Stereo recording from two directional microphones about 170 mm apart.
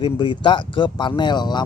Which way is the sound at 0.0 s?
25° left (ahead or behind).